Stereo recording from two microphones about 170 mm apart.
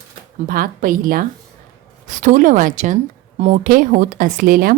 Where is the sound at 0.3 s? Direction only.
55° right (ahead or behind); by 3.6 s 40° right (ahead or behind).